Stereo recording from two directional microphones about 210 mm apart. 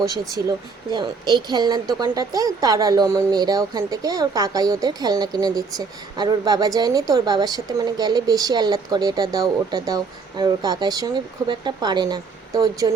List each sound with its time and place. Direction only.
0.0 s speech: 15° right (ahead or behind)